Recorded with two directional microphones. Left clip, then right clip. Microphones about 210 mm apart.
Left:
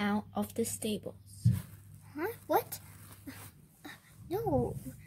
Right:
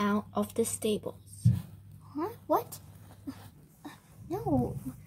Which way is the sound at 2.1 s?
35° left (ahead or behind).